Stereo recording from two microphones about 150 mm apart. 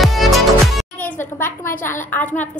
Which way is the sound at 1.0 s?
15° left (ahead or behind).